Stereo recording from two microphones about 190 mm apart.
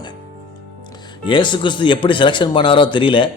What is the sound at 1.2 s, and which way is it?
Speech, 25° left (ahead or behind).